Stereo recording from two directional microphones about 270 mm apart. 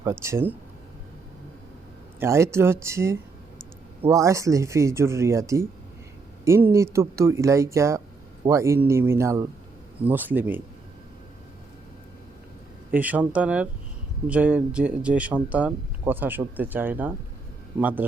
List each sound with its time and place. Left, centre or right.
0.0 s speech: centre
2.1 s speech: centre
12.9 s speech: centre